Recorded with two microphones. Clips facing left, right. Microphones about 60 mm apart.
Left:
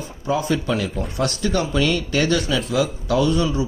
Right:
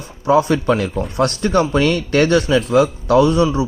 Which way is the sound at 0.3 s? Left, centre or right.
Right.